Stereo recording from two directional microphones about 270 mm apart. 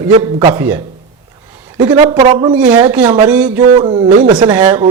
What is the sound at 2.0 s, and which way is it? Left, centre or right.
Speech, centre.